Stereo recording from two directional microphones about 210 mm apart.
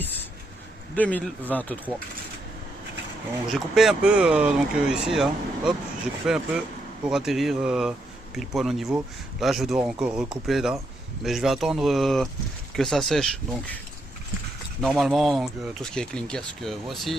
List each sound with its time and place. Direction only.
0.0 s a sound: 10° left (ahead or behind)
0.9 s speech: 5° left (ahead or behind)
3.5 s speech: centre (ahead or behind)
14.8 s speech: centre (ahead or behind)